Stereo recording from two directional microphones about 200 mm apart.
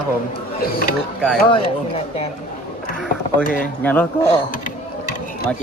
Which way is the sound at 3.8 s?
10° left (ahead or behind).